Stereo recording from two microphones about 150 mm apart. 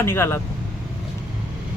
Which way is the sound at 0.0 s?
15° left (ahead or behind).